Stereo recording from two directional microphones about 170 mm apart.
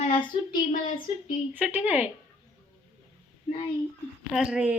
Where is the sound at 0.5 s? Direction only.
55° left (ahead or behind).